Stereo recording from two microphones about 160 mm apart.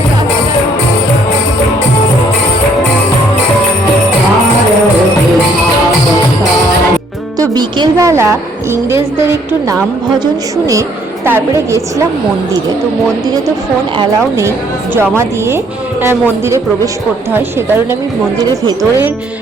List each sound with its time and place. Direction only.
7.5 s a woman's voice: 20° right (ahead or behind)
14.9 s a woman's voice: 15° right (ahead or behind)